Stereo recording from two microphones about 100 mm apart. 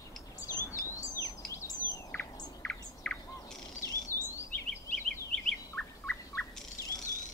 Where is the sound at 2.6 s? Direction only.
10° left (ahead or behind).